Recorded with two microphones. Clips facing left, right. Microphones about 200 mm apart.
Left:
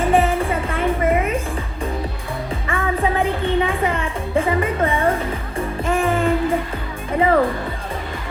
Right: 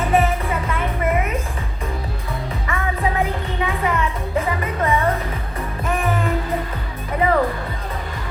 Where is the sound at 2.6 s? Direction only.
30° left (ahead or behind).